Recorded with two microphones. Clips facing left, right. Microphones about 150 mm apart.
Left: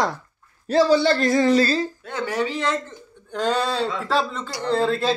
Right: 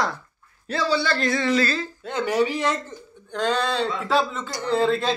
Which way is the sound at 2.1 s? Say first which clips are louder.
Right 6 dB; 20° right (ahead or behind).